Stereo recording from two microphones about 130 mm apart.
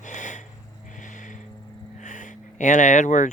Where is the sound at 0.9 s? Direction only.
75° left (ahead or behind).